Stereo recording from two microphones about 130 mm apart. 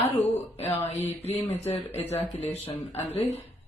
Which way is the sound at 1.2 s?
55° left (ahead or behind).